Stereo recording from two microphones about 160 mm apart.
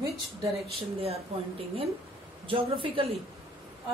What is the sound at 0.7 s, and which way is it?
Speech, 40° right (ahead or behind).